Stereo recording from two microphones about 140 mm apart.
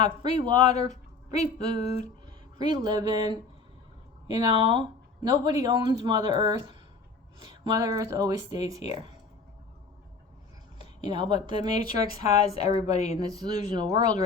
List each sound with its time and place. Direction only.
0.0 s a woman's voice: 30° right (ahead or behind)
11.0 s speech: 30° right (ahead or behind)